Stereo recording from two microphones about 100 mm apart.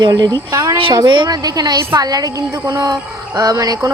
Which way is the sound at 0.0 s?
40° right (ahead or behind).